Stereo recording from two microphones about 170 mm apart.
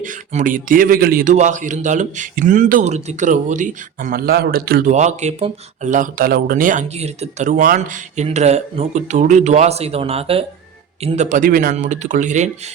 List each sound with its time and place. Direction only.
0.0 s speech: 50° right (ahead or behind)
4.9 s speech: 45° right (ahead or behind)